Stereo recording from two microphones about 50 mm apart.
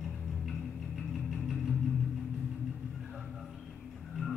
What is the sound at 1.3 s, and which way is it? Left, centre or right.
Music, centre.